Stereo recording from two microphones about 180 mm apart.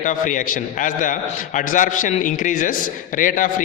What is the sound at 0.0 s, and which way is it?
A man's voice, 45° left (ahead or behind).